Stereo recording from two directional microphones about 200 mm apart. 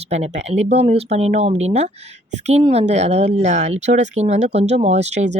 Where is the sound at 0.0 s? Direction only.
35° right (ahead or behind).